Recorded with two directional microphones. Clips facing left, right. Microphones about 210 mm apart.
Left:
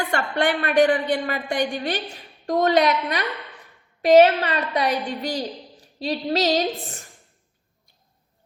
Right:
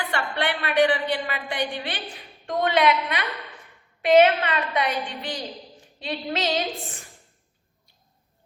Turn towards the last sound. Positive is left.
turn(degrees=40)  # may be behind; listen again after turning